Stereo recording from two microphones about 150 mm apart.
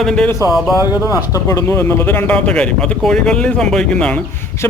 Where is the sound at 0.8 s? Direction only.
25° left (ahead or behind); by 4.2 s 5° left (ahead or behind).